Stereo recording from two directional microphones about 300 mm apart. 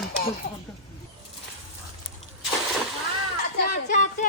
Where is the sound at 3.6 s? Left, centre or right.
Left.